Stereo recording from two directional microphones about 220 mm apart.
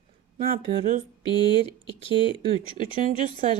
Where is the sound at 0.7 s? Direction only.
35° right (ahead or behind).